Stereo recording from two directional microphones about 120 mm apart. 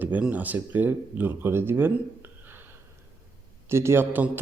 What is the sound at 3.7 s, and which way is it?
Speech, 20° right (ahead or behind).